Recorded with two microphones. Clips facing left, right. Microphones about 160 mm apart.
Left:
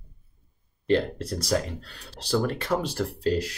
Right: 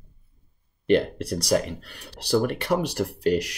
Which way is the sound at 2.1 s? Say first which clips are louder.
Right 3 dB; 65° right (ahead or behind).